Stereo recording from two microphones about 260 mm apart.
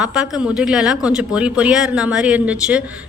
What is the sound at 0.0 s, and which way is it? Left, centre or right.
Speech, centre.